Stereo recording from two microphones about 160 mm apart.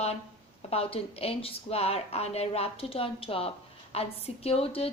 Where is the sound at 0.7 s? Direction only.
40° left (ahead or behind).